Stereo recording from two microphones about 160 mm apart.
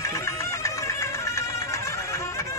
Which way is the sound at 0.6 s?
20° left (ahead or behind).